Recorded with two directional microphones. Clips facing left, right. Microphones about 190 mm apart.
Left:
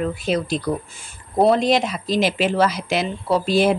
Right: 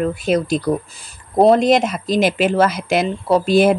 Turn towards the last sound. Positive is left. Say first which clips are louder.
# right 4 dB
turn(degrees=-50)  # may be behind; listen again after turning